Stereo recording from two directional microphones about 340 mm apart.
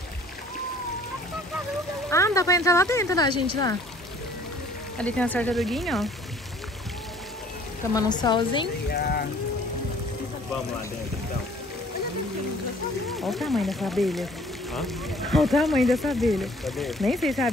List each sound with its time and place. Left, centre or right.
2.0 s speech: centre
4.9 s speech: centre
7.9 s speech: centre
8.9 s speech: left
13.3 s speech: centre